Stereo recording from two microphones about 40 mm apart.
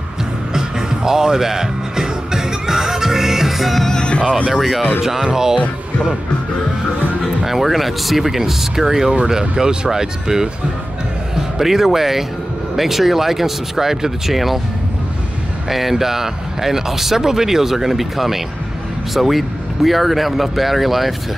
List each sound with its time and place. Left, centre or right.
0.5 s music: centre
4.0 s music: left
4.5 s speech: centre
7.4 s speech: centre
11.5 s speech: centre
15.7 s speech: centre